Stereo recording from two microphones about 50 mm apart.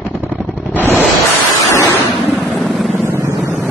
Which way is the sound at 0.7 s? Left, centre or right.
Left.